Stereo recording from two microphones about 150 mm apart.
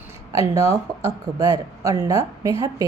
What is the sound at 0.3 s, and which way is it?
Speech, 20° right (ahead or behind).